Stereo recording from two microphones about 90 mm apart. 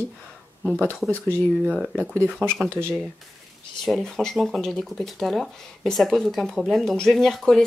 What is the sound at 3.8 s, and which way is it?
Speech, 5° left (ahead or behind).